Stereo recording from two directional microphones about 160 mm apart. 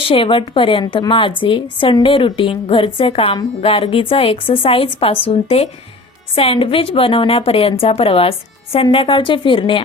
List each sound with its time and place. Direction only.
0.0 s a woman's voice: 35° left (ahead or behind)